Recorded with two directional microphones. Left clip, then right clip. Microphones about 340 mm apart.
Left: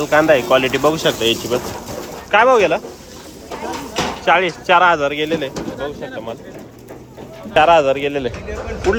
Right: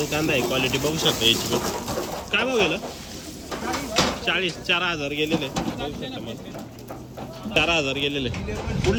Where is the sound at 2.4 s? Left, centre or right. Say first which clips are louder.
Left 10 dB; centre.